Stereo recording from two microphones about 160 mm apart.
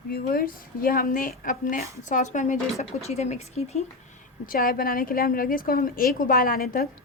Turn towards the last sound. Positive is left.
turn(degrees=70)  # may be behind; listen again after turning